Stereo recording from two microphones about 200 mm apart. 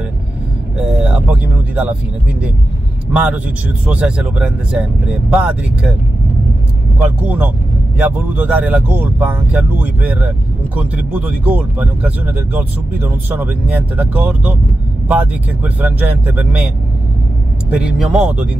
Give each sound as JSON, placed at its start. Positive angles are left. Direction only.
{"t": 0.7, "sound": "a sound", "side_deg": -5}
{"t": 3.1, "sound": "speech", "side_deg": -5}
{"t": 7.0, "sound": "speech", "side_deg": -5}